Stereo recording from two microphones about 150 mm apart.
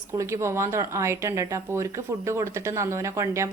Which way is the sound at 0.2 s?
20° right (ahead or behind).